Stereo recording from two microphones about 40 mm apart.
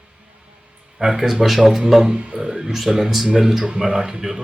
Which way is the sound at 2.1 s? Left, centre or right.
Right.